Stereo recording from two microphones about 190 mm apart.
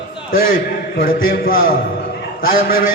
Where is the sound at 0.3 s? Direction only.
50° left (ahead or behind).